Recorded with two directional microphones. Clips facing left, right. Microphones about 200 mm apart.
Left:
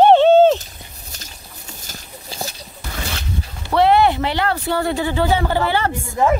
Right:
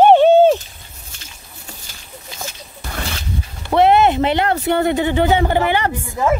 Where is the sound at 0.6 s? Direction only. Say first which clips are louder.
Left 3 dB; 40° left (ahead or behind).